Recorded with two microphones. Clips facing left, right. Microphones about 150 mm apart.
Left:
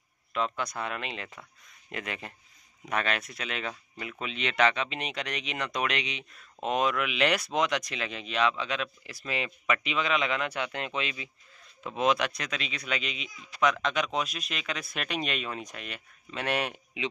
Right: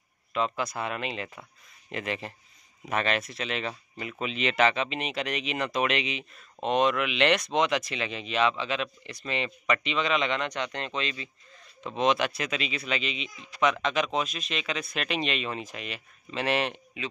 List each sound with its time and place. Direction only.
0.3 s speech: centre (ahead or behind)
17.0 s a man's voice: 20° left (ahead or behind)